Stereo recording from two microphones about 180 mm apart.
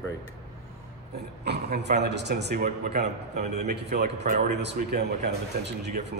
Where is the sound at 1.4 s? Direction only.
65° right (ahead or behind).